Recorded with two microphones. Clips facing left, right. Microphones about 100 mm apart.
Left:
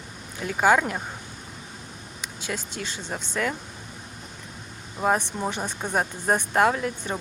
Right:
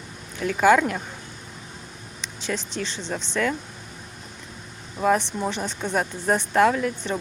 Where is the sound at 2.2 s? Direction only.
15° left (ahead or behind).